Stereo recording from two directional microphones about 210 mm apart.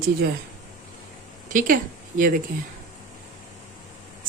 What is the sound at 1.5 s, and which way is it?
Speech, 40° right (ahead or behind).